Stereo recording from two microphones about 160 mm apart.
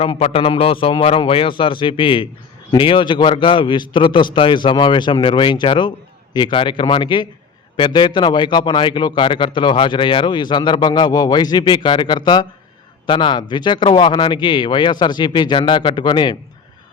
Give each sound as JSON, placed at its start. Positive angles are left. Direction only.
{"t": 0.0, "sound": "a man's voice", "side_deg": 35}